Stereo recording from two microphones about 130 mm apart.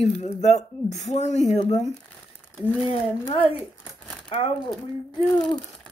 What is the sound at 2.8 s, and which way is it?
Speech, 45° left (ahead or behind).